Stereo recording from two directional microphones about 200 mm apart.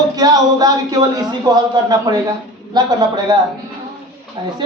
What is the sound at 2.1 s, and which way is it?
Speech, 15° right (ahead or behind).